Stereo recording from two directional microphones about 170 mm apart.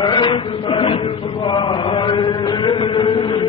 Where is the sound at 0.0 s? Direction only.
25° left (ahead or behind).